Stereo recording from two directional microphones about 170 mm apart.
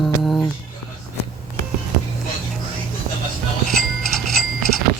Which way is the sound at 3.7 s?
Centre (ahead or behind).